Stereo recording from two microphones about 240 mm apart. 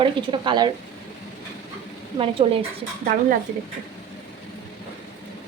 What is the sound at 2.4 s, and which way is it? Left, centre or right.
Speech, right.